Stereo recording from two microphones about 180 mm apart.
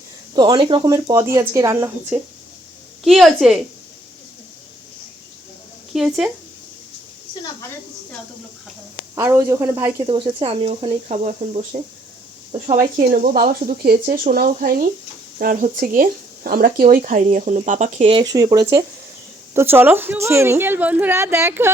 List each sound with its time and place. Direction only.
0.3 s speech: 25° right (ahead or behind)
3.0 s a woman's voice: centre (ahead or behind)
5.9 s a woman's voice: centre (ahead or behind)
9.1 s a woman's voice: 15° right (ahead or behind)
10.1 s speech: 30° right (ahead or behind)
13.0 s a woman's voice: 50° right (ahead or behind); by 21.7 s 15° right (ahead or behind)